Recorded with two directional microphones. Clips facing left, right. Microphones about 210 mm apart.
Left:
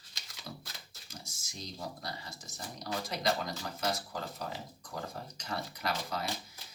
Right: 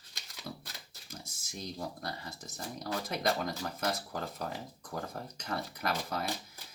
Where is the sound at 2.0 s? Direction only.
55° right (ahead or behind).